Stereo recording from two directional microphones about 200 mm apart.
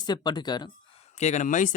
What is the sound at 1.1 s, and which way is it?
Speech, 35° left (ahead or behind).